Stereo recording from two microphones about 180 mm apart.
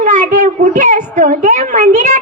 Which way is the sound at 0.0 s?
40° right (ahead or behind).